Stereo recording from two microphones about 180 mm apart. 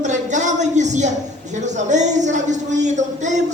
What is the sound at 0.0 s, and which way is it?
A man's voice, 40° right (ahead or behind).